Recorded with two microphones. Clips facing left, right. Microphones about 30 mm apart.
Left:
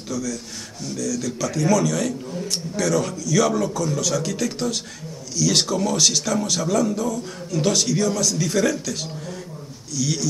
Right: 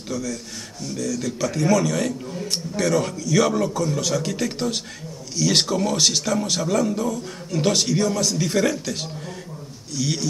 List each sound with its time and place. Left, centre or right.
0.1 s a man's voice: right